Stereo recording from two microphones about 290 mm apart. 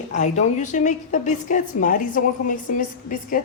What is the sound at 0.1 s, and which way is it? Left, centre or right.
A woman's voice, left.